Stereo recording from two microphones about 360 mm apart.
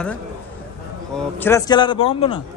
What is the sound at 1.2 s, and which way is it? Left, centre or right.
A man's voice, centre.